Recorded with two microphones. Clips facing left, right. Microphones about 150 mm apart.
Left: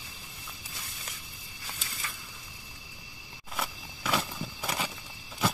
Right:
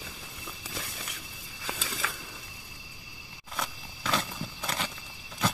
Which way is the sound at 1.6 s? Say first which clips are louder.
Right 7 dB; 90° right.